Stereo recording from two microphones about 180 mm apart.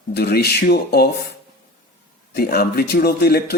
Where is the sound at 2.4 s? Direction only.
60° left (ahead or behind).